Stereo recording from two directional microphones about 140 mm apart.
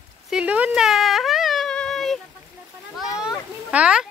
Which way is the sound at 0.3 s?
10° right (ahead or behind).